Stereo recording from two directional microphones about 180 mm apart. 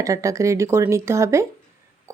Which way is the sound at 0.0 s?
20° right (ahead or behind).